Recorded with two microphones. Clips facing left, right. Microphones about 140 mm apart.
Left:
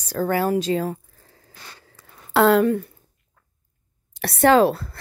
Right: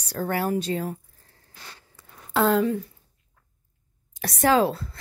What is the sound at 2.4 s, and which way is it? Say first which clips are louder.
Speech: left 5 dB; 70° left (ahead or behind).